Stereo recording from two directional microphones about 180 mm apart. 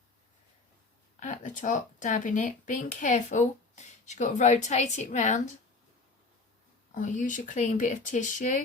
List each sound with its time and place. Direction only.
1.2 s speech: 45° left (ahead or behind)
6.9 s speech: 45° left (ahead or behind)